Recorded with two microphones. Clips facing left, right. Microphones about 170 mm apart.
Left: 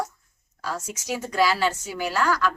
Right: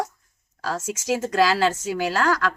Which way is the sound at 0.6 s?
90° right.